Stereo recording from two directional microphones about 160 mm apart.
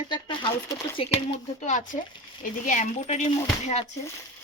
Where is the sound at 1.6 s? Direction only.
50° left (ahead or behind).